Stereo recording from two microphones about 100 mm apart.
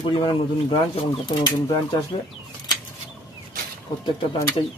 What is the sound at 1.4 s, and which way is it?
Speech, 40° left (ahead or behind).